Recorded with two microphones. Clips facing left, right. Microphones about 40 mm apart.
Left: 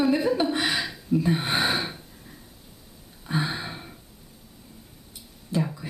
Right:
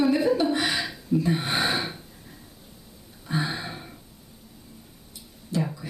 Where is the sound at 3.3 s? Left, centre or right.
Centre.